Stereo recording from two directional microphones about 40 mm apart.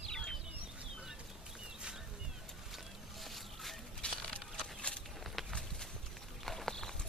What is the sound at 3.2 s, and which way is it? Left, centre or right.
Boat, centre.